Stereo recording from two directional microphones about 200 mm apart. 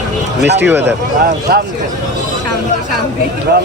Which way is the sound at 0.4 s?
60° right (ahead or behind).